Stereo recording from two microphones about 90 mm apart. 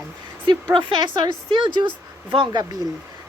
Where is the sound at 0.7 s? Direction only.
65° right (ahead or behind).